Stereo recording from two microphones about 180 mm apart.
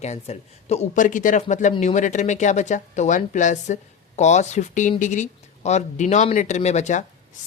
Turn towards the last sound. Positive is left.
turn(degrees=40)  # may be behind; listen again after turning